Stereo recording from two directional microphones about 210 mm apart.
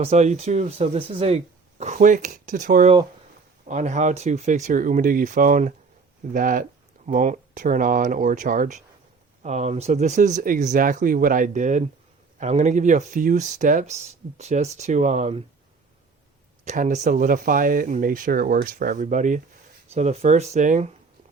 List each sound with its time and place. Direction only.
0.0 s speech: 30° right (ahead or behind)
16.6 s speech: 35° right (ahead or behind)